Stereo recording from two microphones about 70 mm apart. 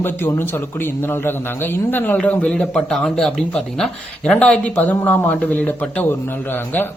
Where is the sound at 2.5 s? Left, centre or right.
Centre.